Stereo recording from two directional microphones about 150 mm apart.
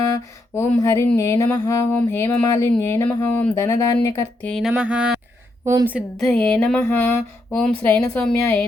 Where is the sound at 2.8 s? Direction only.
15° left (ahead or behind).